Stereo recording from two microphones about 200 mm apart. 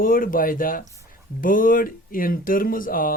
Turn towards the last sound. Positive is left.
turn(degrees=45)  # may be behind; listen again after turning